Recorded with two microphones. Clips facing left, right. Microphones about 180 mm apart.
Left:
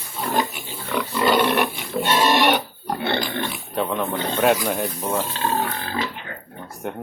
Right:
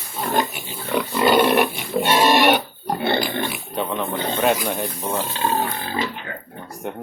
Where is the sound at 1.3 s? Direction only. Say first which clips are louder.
Right 4 dB; 15° right (ahead or behind).